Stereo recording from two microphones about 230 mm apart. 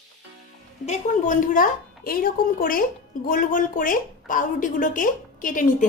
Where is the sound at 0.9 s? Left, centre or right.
Left.